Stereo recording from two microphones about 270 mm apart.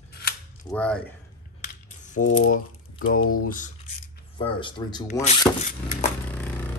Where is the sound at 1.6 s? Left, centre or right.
Left.